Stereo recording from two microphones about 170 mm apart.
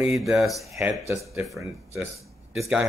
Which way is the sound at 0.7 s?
15° right (ahead or behind).